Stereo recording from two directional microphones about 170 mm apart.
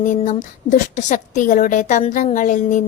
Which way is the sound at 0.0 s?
45° left (ahead or behind).